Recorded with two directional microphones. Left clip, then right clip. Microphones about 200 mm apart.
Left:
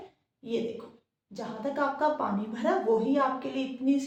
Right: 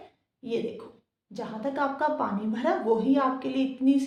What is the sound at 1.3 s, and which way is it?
A woman's voice, 40° right (ahead or behind).